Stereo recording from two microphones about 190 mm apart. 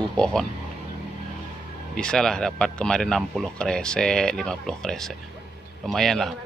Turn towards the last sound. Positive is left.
turn(degrees=0)  # may be behind; listen again after turning